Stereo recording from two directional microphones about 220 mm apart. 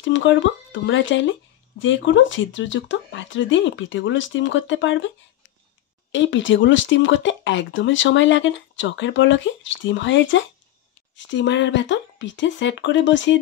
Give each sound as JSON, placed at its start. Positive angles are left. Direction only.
{"t": 0.0, "sound": "speech", "side_deg": 60}
{"t": 6.1, "sound": "speech", "side_deg": 55}